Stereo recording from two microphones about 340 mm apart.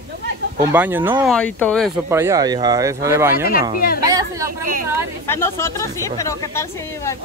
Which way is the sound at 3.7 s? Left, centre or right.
Left.